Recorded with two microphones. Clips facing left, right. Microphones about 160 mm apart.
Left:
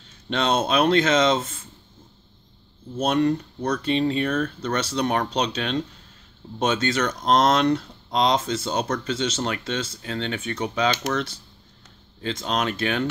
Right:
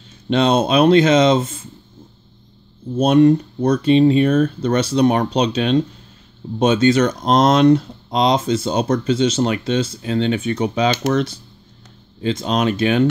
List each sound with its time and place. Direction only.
0.3 s speech: 15° right (ahead or behind)
3.0 s speech: 15° right (ahead or behind)
12.2 s speech: 15° right (ahead or behind)